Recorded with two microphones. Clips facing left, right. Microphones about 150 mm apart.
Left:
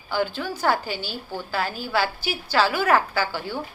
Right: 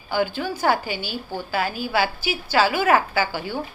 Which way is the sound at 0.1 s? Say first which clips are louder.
Right 2 dB; 15° right (ahead or behind).